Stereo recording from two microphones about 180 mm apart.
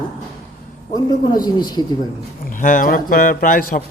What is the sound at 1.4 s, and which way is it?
Speech, 25° left (ahead or behind).